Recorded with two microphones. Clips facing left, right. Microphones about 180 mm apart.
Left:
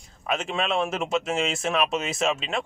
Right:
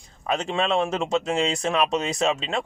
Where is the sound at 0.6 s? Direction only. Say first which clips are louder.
Right 3 dB; 5° left (ahead or behind).